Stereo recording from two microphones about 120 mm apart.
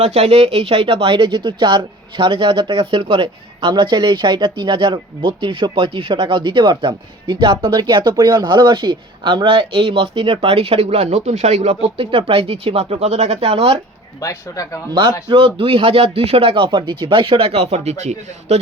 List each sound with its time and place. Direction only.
0.0 s speech: 60° right (ahead or behind)
14.2 s speech: 30° left (ahead or behind)
15.3 s speech: 50° right (ahead or behind); by 18.6 s 65° right (ahead or behind)